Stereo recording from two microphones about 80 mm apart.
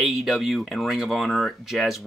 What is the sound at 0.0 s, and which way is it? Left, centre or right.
Speech, centre.